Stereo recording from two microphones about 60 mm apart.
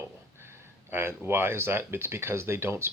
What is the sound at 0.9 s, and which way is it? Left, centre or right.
Speech, right.